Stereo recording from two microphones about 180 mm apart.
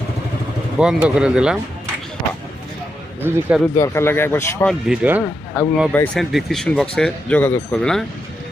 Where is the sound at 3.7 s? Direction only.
15° left (ahead or behind).